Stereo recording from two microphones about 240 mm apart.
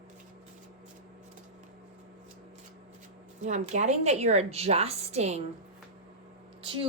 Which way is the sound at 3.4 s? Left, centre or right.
Right.